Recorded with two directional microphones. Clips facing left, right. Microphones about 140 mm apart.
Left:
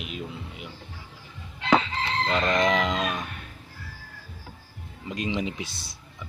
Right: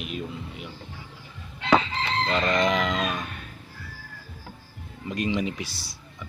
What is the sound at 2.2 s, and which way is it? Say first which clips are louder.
Speech: even; 15° left (ahead or behind).